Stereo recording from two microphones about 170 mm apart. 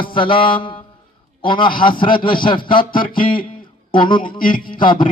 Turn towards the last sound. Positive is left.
turn(degrees=30)  # may be behind; listen again after turning